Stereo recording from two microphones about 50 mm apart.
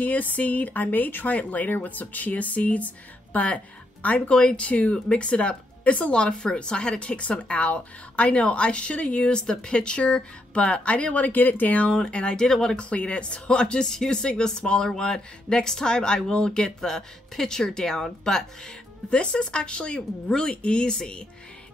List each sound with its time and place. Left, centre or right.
0.0 s speech: left
12.4 s speech: centre
12.7 s speech: left